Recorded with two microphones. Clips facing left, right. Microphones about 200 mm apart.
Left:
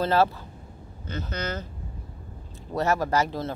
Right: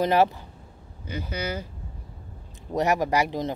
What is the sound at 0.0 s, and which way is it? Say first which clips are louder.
Speech: right 1 dB; 15° right (ahead or behind).